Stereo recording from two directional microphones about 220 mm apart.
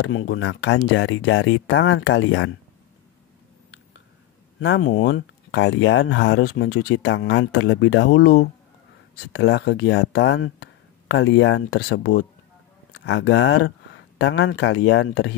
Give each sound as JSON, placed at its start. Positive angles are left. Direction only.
{"t": 0.0, "sound": "speech", "side_deg": 60}
{"t": 4.6, "sound": "speech", "side_deg": 65}
{"t": 7.0, "sound": "speech", "side_deg": 55}